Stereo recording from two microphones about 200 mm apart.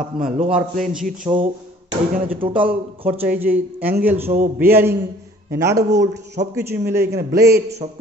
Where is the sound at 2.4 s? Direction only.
25° right (ahead or behind).